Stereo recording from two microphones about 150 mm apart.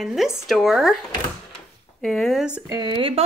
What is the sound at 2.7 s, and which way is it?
Speech, 30° right (ahead or behind).